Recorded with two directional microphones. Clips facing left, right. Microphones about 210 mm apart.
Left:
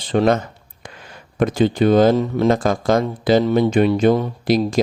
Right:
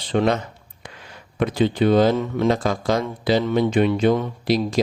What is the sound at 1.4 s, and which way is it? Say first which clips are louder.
Speech: left 3 dB; 45° left (ahead or behind).